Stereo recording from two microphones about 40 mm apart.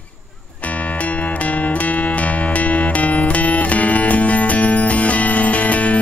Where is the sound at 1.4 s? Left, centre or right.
Left.